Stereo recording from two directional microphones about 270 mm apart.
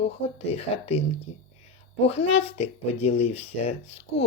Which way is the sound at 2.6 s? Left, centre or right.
Left.